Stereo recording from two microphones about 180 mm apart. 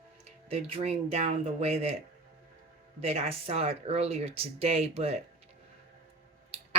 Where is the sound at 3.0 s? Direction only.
35° right (ahead or behind).